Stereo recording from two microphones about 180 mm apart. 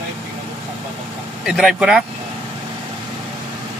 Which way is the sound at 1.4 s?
Centre (ahead or behind).